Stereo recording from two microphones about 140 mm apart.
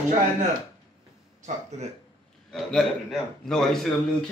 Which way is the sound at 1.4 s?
55° right (ahead or behind).